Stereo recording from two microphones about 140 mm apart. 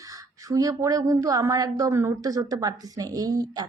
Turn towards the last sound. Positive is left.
turn(degrees=-25)  # may be behind; listen again after turning